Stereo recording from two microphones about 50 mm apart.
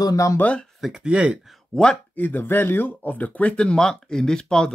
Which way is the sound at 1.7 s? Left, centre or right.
Centre.